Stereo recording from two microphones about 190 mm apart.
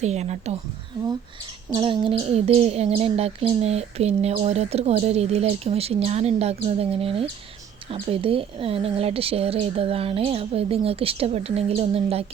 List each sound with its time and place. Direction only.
0.0 s speech: 35° right (ahead or behind)
1.7 s speech: 25° right (ahead or behind)